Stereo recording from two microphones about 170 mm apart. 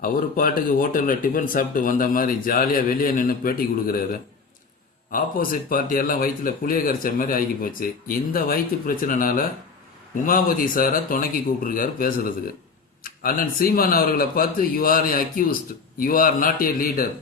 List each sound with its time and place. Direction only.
0.0 s speech: 55° left (ahead or behind)
5.1 s speech: 55° left (ahead or behind)